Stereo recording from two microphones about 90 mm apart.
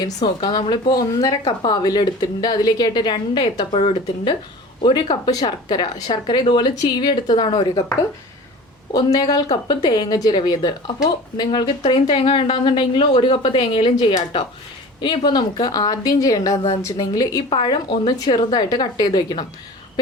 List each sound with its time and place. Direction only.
0.3 s speech: 70° left (ahead or behind)
4.8 s a woman's voice: 60° left (ahead or behind)
8.9 s a woman's voice: 45° left (ahead or behind); by 13.9 s 70° left (ahead or behind)
13.9 s a woman's voice: 50° left (ahead or behind)
17.5 s speech: 65° left (ahead or behind); by 19.5 s 45° left (ahead or behind)